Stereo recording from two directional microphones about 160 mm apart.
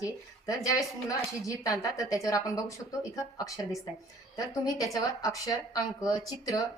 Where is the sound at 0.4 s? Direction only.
20° left (ahead or behind).